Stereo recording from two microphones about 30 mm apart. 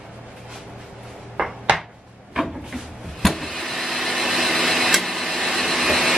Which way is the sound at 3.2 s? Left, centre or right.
Centre.